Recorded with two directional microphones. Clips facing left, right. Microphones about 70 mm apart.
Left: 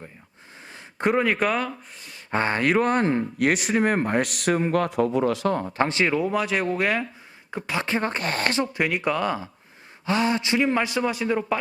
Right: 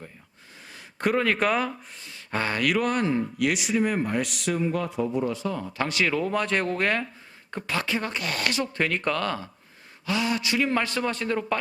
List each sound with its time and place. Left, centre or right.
0.8 s speech: left
1.4 s speech: centre
2.3 s speech: left
5.5 s speech: left
6.1 s speech: centre
7.8 s speech: left
8.6 s speech: centre
10.1 s speech: left; by 11.6 s centre